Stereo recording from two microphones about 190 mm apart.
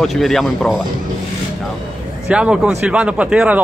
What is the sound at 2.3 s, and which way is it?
Speech, 5° right (ahead or behind).